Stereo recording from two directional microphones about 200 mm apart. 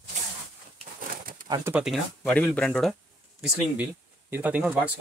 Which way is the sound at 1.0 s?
45° right (ahead or behind).